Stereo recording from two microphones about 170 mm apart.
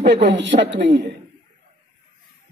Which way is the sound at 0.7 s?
75° right (ahead or behind).